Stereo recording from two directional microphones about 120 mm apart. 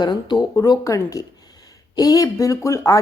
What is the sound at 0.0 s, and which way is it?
Speech, 40° left (ahead or behind).